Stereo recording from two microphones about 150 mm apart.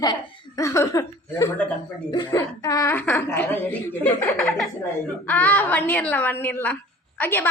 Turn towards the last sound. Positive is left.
turn(degrees=10)  # may be behind; listen again after turning